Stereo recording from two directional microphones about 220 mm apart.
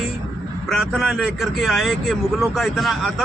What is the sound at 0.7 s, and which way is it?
Speech, centre (ahead or behind).